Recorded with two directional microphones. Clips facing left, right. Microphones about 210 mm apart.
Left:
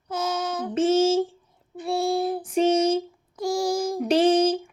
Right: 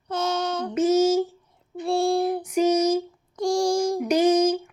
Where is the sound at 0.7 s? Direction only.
30° left (ahead or behind).